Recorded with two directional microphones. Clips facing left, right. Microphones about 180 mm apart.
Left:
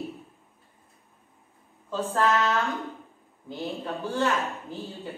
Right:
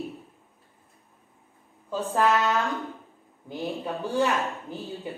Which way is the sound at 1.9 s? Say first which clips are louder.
Right 1 dB; 15° right (ahead or behind).